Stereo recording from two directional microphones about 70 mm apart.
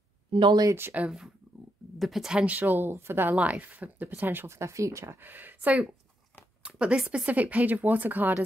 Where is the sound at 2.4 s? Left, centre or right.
Right.